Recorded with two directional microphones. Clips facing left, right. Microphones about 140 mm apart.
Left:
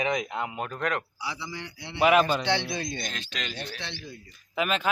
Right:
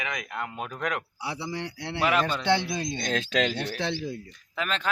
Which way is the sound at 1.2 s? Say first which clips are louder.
Right 3 dB; 60° right (ahead or behind).